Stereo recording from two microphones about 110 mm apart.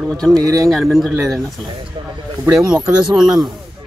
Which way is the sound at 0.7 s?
Centre (ahead or behind).